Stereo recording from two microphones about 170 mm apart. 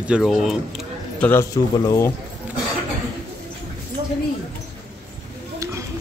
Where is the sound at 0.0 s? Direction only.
5° right (ahead or behind); by 2.1 s 15° left (ahead or behind).